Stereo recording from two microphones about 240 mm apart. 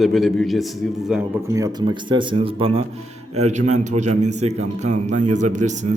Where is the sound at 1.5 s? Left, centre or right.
Centre.